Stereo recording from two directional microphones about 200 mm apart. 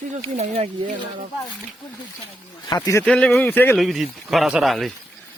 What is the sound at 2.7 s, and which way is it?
Speech, 20° left (ahead or behind).